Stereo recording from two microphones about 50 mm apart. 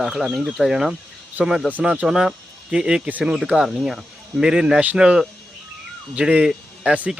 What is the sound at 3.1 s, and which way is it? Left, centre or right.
Speech, right.